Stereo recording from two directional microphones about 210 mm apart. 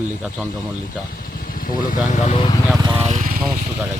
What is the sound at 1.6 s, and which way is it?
Speech, 40° left (ahead or behind).